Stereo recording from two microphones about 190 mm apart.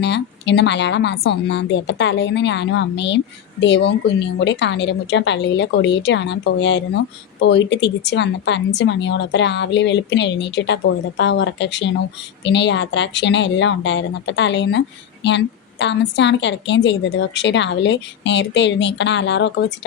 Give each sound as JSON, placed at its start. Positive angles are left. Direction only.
{"t": 0.0, "sound": "a woman's voice", "side_deg": 65}